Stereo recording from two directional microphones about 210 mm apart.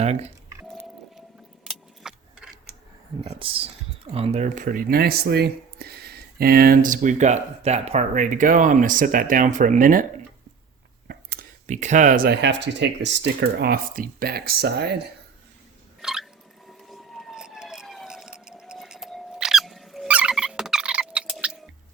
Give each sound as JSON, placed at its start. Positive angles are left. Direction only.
{"t": 0.0, "sound": "speech", "side_deg": -30}
{"t": 1.6, "sound": "keys jangling", "side_deg": 0}
{"t": 3.2, "sound": "speech", "side_deg": -25}
{"t": 11.1, "sound": "speech", "side_deg": -45}
{"t": 16.0, "sound": "a sound", "side_deg": -5}
{"t": 16.9, "sound": "vehicle", "side_deg": 0}